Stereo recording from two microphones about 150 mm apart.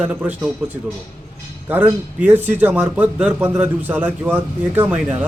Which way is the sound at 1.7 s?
10° right (ahead or behind).